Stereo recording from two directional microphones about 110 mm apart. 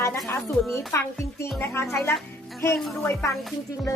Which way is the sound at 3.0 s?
25° left (ahead or behind).